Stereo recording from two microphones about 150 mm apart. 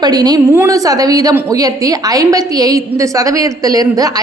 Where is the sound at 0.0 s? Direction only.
25° right (ahead or behind).